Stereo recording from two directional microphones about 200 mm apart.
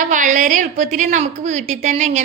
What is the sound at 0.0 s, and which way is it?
A woman's voice, 40° right (ahead or behind).